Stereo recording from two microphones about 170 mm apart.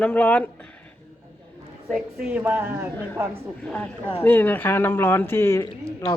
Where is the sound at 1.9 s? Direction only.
5° right (ahead or behind).